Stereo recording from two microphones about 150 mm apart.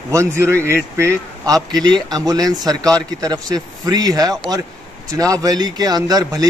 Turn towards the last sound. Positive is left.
turn(degrees=-25)  # may be behind; listen again after turning